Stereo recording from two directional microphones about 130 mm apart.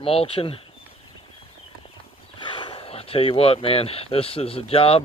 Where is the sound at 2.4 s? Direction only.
40° left (ahead or behind).